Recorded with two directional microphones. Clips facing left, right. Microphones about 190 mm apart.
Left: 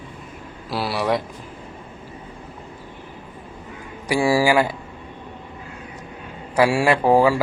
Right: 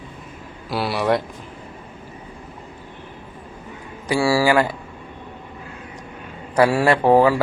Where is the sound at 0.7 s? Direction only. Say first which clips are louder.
Right 2 dB; centre (ahead or behind).